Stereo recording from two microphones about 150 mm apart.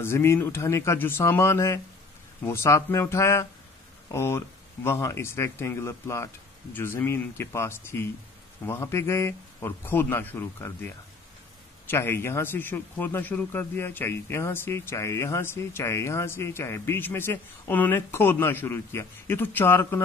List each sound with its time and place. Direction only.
0.0 s speech: 15° left (ahead or behind)
11.9 s speech: 15° left (ahead or behind)